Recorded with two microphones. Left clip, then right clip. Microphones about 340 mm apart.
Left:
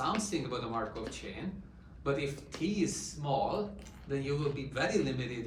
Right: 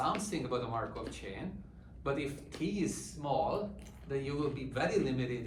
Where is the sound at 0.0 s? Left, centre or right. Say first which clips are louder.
Left 1 dB; right.